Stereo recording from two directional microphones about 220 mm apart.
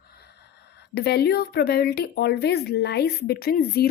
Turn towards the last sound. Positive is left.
turn(degrees=45)  # may be behind; listen again after turning